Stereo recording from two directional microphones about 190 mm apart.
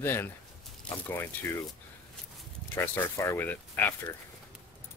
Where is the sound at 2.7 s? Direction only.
15° left (ahead or behind).